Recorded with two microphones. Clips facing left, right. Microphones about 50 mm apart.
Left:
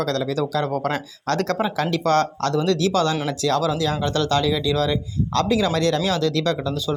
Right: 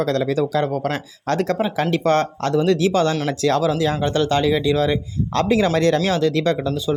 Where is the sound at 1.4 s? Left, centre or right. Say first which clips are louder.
Right 2 dB; centre.